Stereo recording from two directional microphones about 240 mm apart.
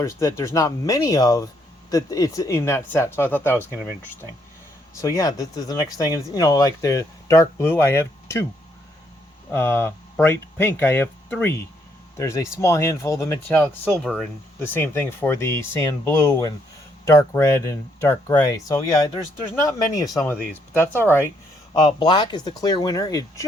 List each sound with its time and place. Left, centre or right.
0.0 s speech: centre
4.9 s speech: centre
9.5 s speech: centre